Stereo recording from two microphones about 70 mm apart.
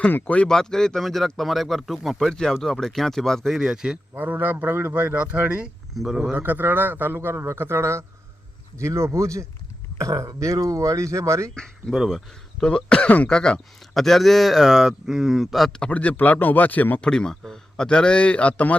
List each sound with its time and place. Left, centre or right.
0.1 s a man's voice: left
0.4 s speech: centre
3.6 s speech: centre
4.1 s speech: right
5.9 s speech: centre
6.3 s a man's voice: right
11.9 s speech: centre
12.6 s a man's voice: centre
15.7 s a man's voice: centre
17.0 s a man's voice: centre